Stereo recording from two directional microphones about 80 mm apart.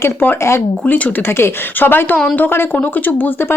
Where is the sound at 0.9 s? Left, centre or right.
Centre.